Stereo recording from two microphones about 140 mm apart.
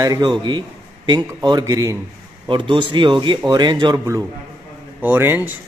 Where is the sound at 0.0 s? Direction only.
30° right (ahead or behind).